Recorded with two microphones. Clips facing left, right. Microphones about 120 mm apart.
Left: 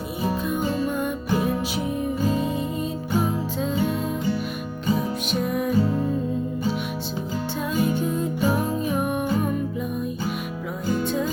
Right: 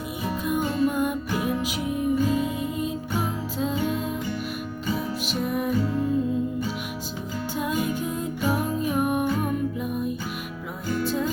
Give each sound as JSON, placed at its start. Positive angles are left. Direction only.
{"t": 0.4, "sound": "music", "side_deg": -10}
{"t": 1.3, "sound": "music", "side_deg": 35}
{"t": 2.5, "sound": "music", "side_deg": -10}
{"t": 5.3, "sound": "music", "side_deg": 0}
{"t": 8.2, "sound": "music", "side_deg": -5}